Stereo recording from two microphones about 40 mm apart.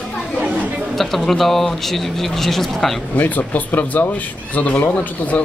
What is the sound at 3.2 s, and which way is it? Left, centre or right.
Speech, left.